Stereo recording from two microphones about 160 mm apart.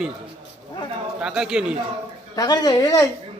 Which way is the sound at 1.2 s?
5° right (ahead or behind).